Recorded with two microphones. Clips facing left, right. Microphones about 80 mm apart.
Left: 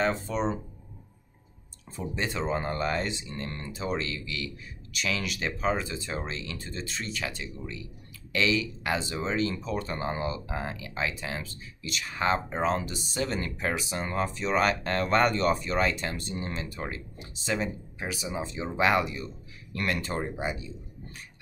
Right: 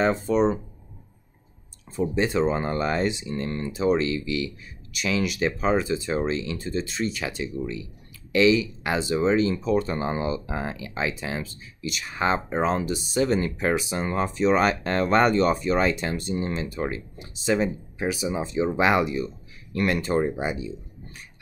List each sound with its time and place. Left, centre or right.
0.0 s speech: centre
2.0 s speech: right